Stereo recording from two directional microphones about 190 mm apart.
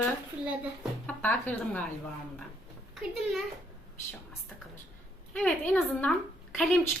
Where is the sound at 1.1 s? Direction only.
10° left (ahead or behind).